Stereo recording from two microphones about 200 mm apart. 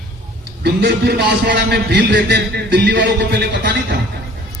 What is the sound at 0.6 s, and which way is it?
A man's voice, 55° right (ahead or behind).